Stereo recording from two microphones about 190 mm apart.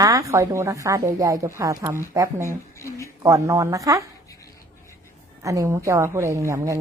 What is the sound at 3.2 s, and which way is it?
Speech, 15° right (ahead or behind).